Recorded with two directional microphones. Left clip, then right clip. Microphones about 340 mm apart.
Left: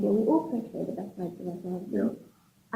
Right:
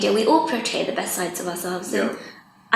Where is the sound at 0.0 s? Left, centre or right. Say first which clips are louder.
Right 8 dB; centre.